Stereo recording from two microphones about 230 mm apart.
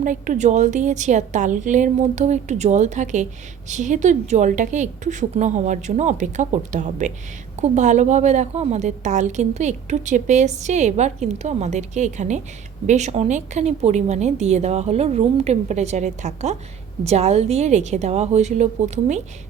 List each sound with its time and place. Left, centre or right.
0.0 s a woman's voice: right